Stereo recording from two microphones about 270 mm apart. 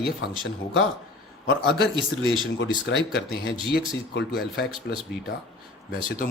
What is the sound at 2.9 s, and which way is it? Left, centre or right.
Speech, left.